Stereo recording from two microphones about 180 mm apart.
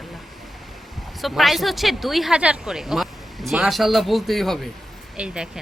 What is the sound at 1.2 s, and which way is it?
A woman's voice, centre (ahead or behind).